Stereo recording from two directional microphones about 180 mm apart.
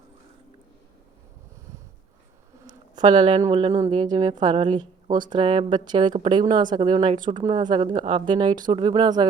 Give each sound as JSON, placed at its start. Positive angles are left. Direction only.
{"t": 2.9, "sound": "speech", "side_deg": -25}